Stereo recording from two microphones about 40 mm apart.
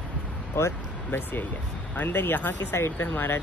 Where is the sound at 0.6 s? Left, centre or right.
Left.